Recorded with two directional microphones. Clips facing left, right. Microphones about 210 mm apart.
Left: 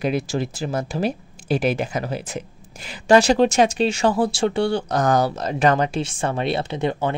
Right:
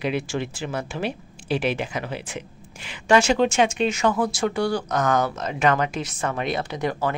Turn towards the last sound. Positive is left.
turn(degrees=25)  # may be behind; listen again after turning